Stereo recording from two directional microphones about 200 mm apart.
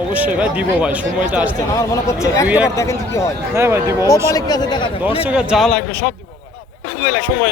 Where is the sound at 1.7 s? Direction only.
15° left (ahead or behind).